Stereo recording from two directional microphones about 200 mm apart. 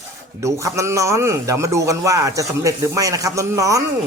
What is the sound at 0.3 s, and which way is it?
A man's voice, 15° right (ahead or behind).